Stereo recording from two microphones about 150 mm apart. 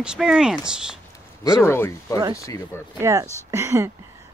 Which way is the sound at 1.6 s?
15° left (ahead or behind).